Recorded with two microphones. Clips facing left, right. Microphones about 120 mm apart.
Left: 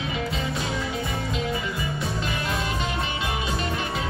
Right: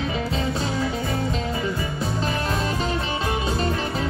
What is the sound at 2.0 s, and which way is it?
Music, 35° right (ahead or behind).